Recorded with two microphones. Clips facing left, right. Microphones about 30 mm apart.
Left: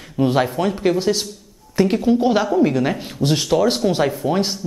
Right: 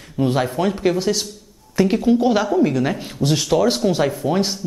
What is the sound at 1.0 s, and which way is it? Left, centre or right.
Speech, centre.